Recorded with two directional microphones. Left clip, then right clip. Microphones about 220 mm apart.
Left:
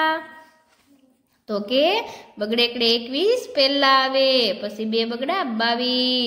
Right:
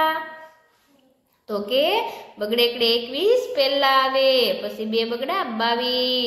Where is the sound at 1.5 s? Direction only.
45° left (ahead or behind).